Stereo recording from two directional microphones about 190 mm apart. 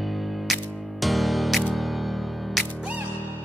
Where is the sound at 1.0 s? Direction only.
Centre (ahead or behind).